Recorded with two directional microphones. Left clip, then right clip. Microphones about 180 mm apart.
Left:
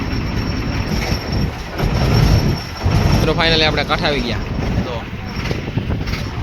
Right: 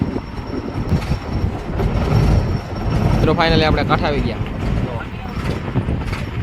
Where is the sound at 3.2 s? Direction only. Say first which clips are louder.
Even; 5° right (ahead or behind).